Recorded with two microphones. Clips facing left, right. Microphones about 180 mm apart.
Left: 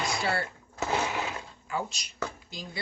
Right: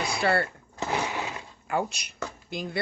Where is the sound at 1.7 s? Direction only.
60° right (ahead or behind).